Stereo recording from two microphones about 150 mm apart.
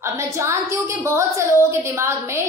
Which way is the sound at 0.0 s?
20° right (ahead or behind).